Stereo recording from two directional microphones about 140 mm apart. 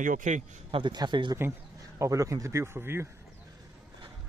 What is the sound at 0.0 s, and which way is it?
Speech, 65° right (ahead or behind).